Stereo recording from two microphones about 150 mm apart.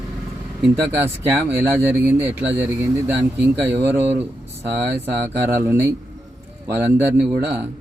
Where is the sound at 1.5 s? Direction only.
15° right (ahead or behind).